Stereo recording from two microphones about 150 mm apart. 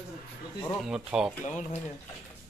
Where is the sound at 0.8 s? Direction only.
5° right (ahead or behind).